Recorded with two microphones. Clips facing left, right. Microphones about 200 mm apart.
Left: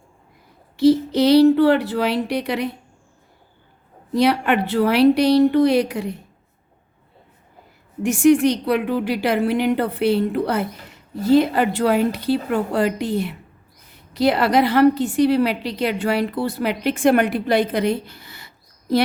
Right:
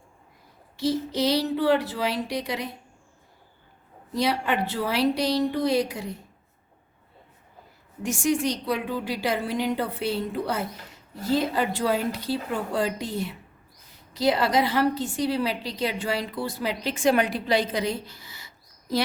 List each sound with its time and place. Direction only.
0.8 s a woman's voice: 65° left (ahead or behind)
4.1 s a woman's voice: 65° left (ahead or behind)
8.0 s a woman's voice: 65° left (ahead or behind)